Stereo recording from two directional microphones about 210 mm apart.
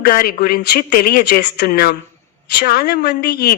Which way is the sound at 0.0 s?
45° left (ahead or behind).